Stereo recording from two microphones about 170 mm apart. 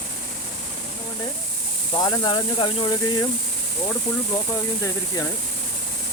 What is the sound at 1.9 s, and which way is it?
Speech, 25° left (ahead or behind).